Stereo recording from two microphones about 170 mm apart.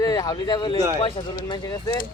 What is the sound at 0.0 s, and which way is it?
A man's voice, 20° left (ahead or behind).